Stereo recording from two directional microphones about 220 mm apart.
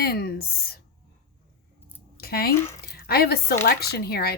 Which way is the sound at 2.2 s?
45° left (ahead or behind).